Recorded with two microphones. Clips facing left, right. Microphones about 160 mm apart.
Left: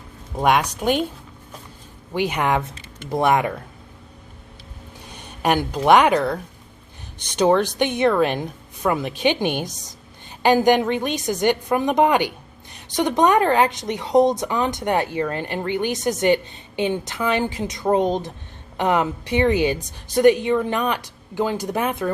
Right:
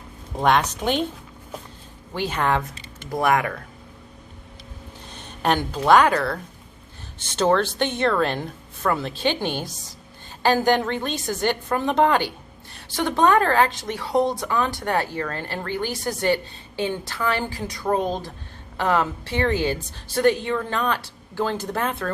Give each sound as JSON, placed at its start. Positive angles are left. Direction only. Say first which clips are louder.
{"t": 0.3, "sound": "speech", "louder": "left 1 dB", "side_deg": 10}
{"t": 2.1, "sound": "speech", "louder": "left 2 dB", "side_deg": 15}
{"t": 5.0, "sound": "speech", "louder": "left 2 dB", "side_deg": 10}